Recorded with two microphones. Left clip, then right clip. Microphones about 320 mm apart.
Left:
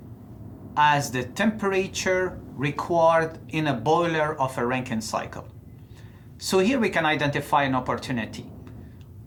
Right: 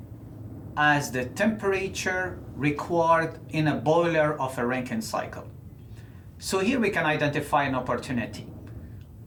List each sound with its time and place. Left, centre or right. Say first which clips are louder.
0.7 s speech: left 3 dB; left
6.4 s speech: left 3 dB; left